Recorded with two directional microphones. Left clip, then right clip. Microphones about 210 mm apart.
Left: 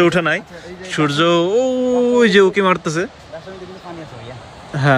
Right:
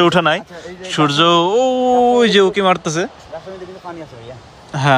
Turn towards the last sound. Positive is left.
turn(degrees=-10)  # may be behind; listen again after turning